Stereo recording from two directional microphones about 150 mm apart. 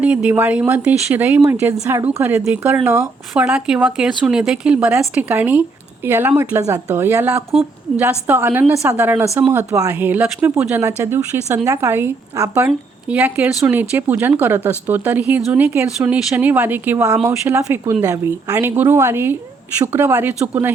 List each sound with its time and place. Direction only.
0.0 s a woman's voice: 10° right (ahead or behind)